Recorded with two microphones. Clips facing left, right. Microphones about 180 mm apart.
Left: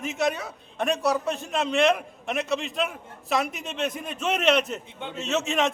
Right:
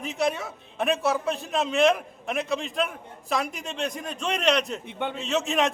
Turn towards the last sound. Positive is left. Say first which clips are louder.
# even
turn(degrees=0)  # may be behind; listen again after turning